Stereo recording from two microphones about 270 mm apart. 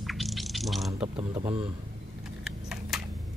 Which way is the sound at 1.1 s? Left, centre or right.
Centre.